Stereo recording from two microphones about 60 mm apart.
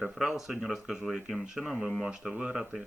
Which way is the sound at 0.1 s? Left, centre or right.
Centre.